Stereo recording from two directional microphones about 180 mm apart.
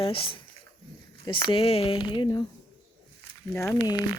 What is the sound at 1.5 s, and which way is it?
Speech, 30° left (ahead or behind).